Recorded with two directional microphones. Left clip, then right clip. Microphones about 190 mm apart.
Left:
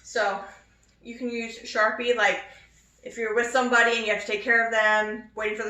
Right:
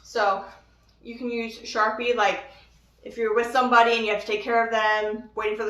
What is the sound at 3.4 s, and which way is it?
A woman's voice, 20° right (ahead or behind).